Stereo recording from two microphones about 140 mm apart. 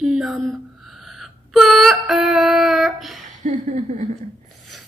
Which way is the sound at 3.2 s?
60° right (ahead or behind).